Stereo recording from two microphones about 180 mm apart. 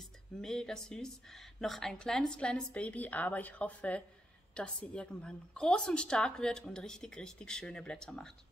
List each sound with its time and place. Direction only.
0.4 s a woman's voice: 5° left (ahead or behind)